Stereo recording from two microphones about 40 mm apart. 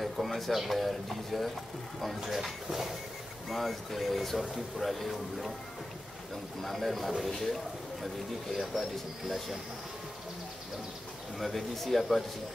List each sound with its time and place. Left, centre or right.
0.0 s speech: centre
6.6 s a man's voice: centre
11.3 s speech: centre